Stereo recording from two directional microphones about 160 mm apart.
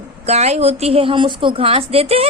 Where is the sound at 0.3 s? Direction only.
40° right (ahead or behind).